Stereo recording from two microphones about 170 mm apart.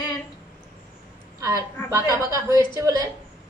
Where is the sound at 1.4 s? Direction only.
15° right (ahead or behind).